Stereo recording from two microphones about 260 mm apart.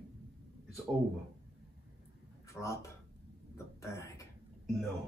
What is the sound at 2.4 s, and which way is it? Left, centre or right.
Speech, centre.